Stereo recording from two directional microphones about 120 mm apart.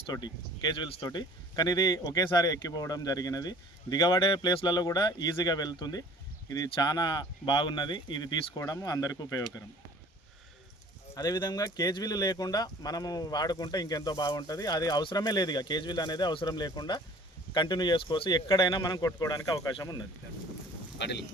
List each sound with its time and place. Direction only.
0.1 s speech: 40° left (ahead or behind)
11.1 s speech: 30° left (ahead or behind)